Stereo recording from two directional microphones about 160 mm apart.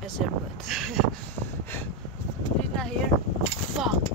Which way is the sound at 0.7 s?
Centre (ahead or behind).